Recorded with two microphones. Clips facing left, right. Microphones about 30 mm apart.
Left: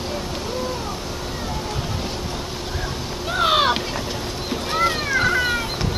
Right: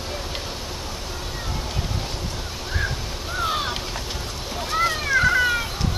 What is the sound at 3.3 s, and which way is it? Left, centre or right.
Vehicle, left.